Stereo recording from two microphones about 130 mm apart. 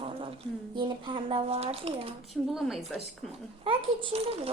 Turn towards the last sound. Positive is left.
turn(degrees=-50)  # may be behind; listen again after turning